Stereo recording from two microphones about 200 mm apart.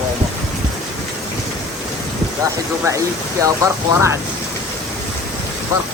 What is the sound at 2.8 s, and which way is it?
Speech, 15° right (ahead or behind).